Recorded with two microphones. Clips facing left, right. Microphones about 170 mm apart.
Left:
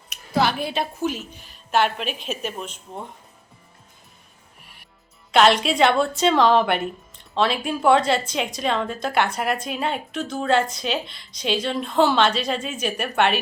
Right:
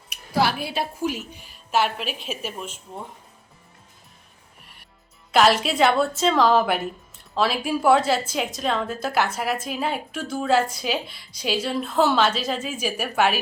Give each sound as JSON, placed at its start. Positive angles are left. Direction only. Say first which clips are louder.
{"t": 0.1, "sound": "a woman's voice", "louder": "left 1 dB", "side_deg": -10}
{"t": 4.6, "sound": "music", "louder": "left 1 dB", "side_deg": 0}
{"t": 5.3, "sound": "a woman's voice", "louder": "left 1 dB", "side_deg": 0}